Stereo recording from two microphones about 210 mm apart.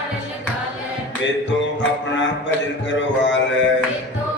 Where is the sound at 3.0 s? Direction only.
60° left (ahead or behind).